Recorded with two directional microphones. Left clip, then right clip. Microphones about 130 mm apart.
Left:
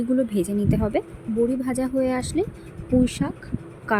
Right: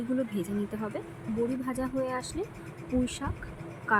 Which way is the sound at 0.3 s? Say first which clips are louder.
Left 10 dB; 45° left (ahead or behind).